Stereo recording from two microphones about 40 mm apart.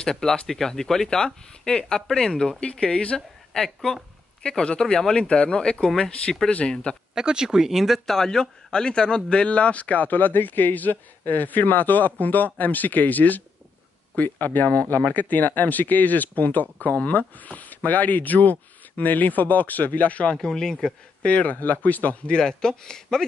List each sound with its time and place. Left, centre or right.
0.0 s speech: centre
1.7 s speech: left
2.6 s speech: left
3.5 s speech: centre
4.4 s speech: left
7.2 s speech: centre
8.1 s speech: centre; by 20.3 s left
20.4 s speech: centre
21.3 s speech: left
21.5 s speech: left
22.4 s speech: centre